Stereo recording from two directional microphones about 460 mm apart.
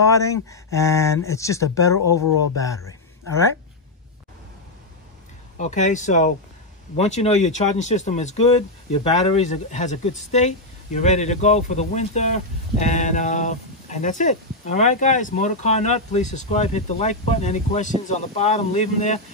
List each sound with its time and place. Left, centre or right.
0.0 s speech: centre
5.6 s speech: centre